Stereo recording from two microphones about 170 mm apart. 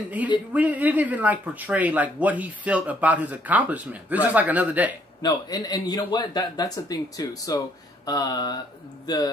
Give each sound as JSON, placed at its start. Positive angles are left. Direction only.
{"t": 0.2, "sound": "speech", "side_deg": -10}
{"t": 5.2, "sound": "a man's voice", "side_deg": 25}